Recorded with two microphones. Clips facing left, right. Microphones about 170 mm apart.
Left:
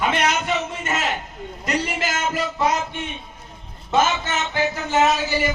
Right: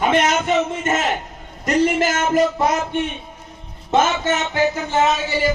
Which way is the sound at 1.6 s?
45° right (ahead or behind).